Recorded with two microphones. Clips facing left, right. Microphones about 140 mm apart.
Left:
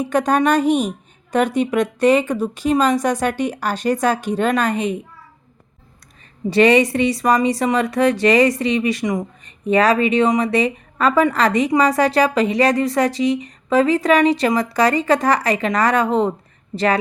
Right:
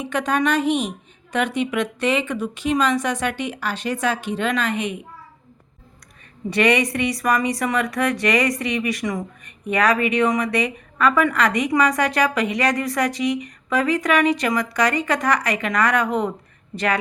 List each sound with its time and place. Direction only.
0.0 s a woman's voice: 40° left (ahead or behind)
6.5 s a woman's voice: 30° left (ahead or behind)